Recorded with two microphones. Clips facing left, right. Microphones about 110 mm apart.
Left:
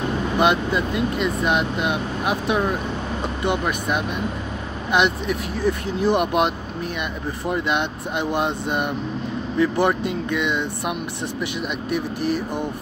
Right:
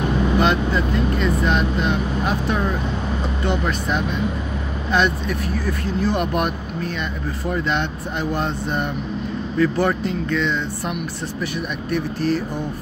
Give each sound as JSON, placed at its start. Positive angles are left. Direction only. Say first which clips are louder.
{"t": 0.4, "sound": "speech", "louder": "left 3 dB", "side_deg": 15}